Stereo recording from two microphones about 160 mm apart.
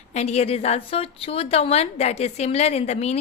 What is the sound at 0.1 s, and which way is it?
A woman's voice, 45° left (ahead or behind).